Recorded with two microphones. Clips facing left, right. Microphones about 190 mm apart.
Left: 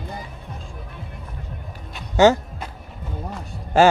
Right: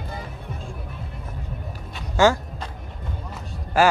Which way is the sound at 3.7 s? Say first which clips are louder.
Left 4 dB; 25° left (ahead or behind).